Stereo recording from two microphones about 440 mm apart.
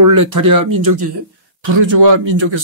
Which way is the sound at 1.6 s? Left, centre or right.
Right.